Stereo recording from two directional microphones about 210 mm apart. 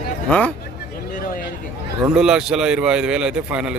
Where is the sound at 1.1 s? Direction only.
40° left (ahead or behind).